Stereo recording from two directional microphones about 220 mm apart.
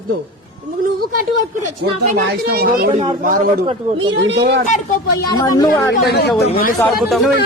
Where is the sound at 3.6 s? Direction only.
30° right (ahead or behind).